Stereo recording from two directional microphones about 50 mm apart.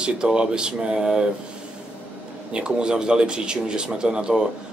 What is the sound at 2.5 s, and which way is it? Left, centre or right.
Speech, centre.